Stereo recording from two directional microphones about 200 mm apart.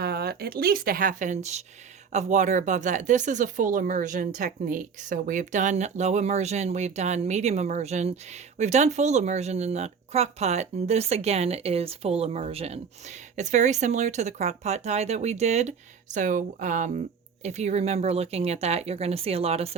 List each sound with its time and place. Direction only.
0.0 s speech: 50° right (ahead or behind); by 19.7 s 30° right (ahead or behind)